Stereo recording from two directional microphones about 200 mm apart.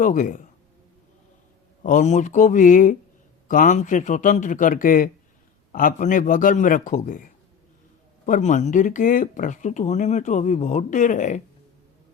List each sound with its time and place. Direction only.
0.0 s speech: 40° left (ahead or behind)
1.8 s speech: 40° left (ahead or behind)
8.3 s speech: 35° left (ahead or behind)